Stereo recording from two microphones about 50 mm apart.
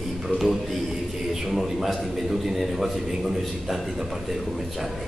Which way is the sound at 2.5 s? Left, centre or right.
Centre.